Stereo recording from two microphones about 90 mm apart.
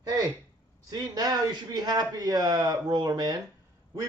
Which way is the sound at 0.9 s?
45° right (ahead or behind).